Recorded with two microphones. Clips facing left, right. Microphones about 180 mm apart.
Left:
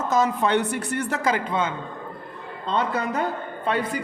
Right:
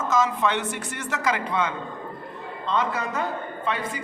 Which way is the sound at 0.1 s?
35° left (ahead or behind).